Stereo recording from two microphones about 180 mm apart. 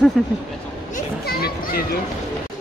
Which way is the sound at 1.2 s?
60° left (ahead or behind).